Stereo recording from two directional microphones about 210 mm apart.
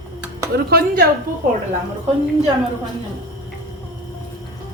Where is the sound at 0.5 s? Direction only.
45° right (ahead or behind).